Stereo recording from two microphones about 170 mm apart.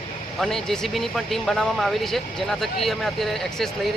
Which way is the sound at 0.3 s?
Centre (ahead or behind).